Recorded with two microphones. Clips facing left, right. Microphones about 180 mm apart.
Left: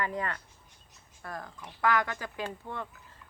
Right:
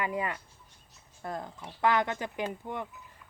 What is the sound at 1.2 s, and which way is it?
A woman's voice, 25° right (ahead or behind).